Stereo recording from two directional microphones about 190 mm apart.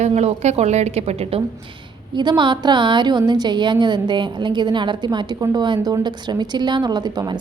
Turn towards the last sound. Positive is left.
turn(degrees=-20)  # may be behind; listen again after turning